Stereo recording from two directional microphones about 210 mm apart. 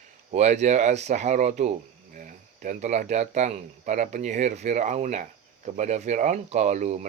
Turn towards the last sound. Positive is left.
turn(degrees=-35)  # may be behind; listen again after turning